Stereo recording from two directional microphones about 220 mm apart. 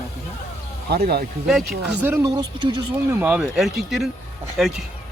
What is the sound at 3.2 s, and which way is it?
Speech, 5° right (ahead or behind).